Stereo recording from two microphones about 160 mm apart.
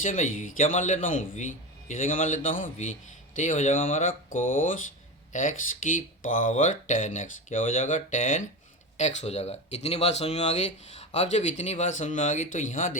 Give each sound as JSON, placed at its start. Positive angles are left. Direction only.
{"t": 0.0, "sound": "speech", "side_deg": 55}